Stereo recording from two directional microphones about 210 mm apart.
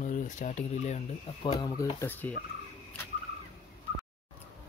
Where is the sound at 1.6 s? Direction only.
15° left (ahead or behind).